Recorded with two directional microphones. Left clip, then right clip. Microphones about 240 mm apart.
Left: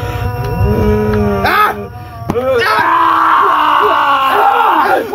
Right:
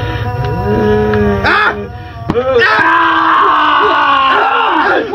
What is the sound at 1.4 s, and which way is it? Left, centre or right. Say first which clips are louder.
Music: even; centre.